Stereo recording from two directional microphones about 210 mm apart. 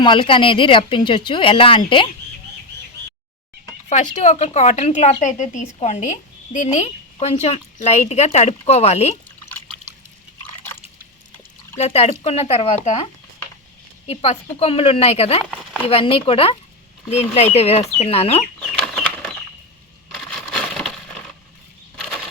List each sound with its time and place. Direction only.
0.0 s speech: 25° left (ahead or behind)
3.8 s speech: 35° left (ahead or behind)
11.8 s speech: 30° left (ahead or behind)
14.1 s speech: 30° left (ahead or behind)
18.8 s a sound: 5° left (ahead or behind)